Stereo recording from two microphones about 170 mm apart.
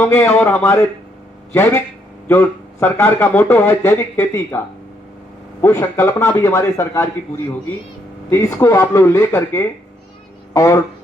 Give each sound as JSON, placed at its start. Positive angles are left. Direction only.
{"t": 0.0, "sound": "speech", "side_deg": 15}
{"t": 5.6, "sound": "speech", "side_deg": 15}